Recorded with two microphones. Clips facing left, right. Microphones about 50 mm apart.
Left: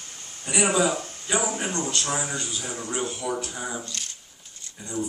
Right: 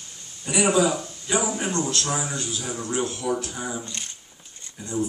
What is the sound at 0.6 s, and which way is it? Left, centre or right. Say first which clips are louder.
Speech: right 2 dB; centre.